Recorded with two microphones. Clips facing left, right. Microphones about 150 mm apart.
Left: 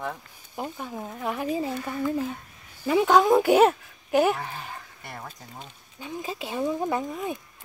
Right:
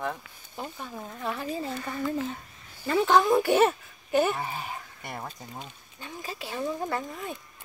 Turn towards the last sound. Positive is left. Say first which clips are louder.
# left 4 dB
turn(degrees=15)  # may be behind; listen again after turning